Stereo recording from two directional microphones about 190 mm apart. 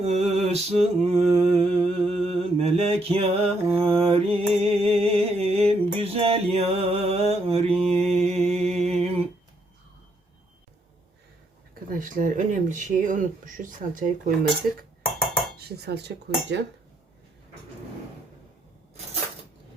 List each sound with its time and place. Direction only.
0.0 s a sound: 35° right (ahead or behind)
2.2 s mantra: 30° right (ahead or behind)
11.9 s speech: 45° right (ahead or behind)
15.5 s speech: 60° right (ahead or behind)